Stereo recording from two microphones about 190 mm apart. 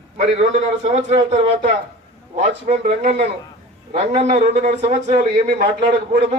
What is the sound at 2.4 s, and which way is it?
A man's voice, 35° right (ahead or behind).